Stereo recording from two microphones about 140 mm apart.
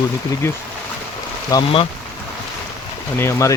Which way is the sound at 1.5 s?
30° left (ahead or behind).